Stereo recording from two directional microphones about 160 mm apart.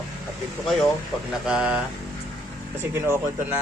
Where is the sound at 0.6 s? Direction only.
Centre (ahead or behind); by 3.3 s 15° right (ahead or behind).